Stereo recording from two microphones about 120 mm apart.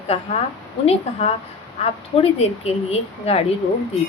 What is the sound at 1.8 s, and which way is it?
A woman's voice, 60° left (ahead or behind).